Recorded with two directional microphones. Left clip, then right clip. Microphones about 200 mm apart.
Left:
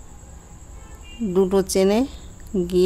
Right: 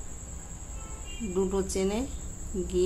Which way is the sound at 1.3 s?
60° left (ahead or behind).